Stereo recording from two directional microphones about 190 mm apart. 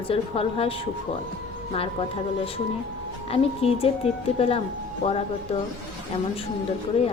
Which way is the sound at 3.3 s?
30° left (ahead or behind).